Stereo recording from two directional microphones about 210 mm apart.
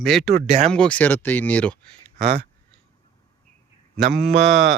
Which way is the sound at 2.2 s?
45° right (ahead or behind).